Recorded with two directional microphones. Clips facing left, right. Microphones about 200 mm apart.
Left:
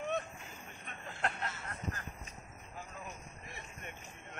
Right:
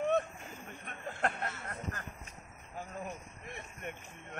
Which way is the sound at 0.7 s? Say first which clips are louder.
Right 6 dB; 50° right (ahead or behind).